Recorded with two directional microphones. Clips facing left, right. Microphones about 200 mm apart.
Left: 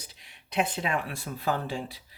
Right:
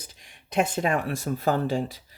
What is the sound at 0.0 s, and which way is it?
Speech, 45° right (ahead or behind).